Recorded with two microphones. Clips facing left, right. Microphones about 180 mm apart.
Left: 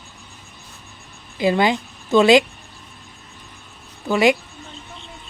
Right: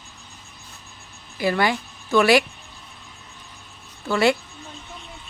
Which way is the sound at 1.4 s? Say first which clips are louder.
Left 4 dB; 20° left (ahead or behind).